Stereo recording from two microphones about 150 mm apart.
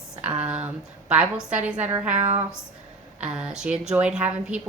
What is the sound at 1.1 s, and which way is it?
A woman's voice, 5° right (ahead or behind).